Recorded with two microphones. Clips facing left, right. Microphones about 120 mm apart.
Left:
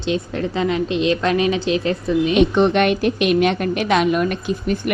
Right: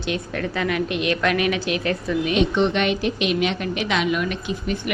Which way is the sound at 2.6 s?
50° left (ahead or behind).